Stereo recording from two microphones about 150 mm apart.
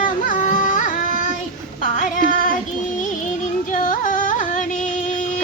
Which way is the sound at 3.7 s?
60° left (ahead or behind).